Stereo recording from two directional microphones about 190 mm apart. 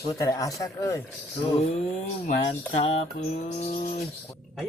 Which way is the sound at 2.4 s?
30° left (ahead or behind).